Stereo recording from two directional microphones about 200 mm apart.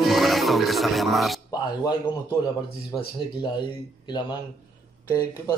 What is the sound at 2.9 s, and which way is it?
A man's voice, 20° left (ahead or behind).